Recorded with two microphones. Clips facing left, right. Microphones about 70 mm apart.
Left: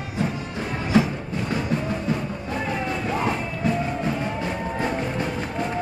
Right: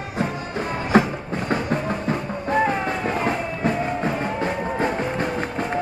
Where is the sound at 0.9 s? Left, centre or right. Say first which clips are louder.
Right 2 dB; right.